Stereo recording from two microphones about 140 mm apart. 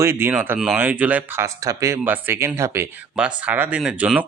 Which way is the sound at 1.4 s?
25° right (ahead or behind).